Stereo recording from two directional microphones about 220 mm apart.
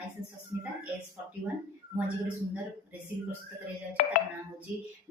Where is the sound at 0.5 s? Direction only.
10° right (ahead or behind).